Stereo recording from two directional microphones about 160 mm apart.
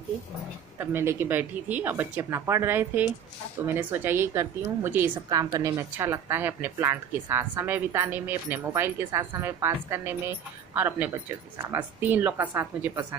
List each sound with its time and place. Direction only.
0.7 s a woman's voice: 15° right (ahead or behind)